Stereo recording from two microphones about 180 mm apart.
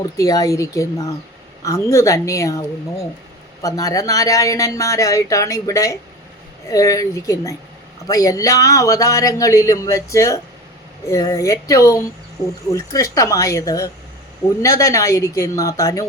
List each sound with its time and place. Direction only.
0.2 s speech: 20° left (ahead or behind)